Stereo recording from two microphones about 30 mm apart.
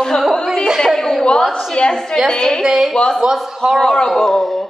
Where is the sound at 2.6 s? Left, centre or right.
Centre.